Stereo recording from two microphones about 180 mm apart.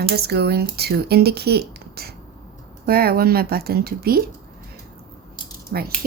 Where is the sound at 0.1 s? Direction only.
65° right (ahead or behind).